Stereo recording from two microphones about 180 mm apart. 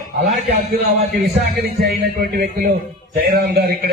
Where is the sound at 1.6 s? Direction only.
60° right (ahead or behind).